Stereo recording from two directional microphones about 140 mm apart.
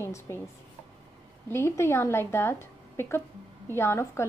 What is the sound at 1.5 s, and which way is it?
A woman's voice, 20° left (ahead or behind).